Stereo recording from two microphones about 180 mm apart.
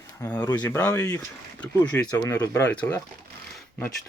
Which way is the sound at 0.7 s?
10° left (ahead or behind).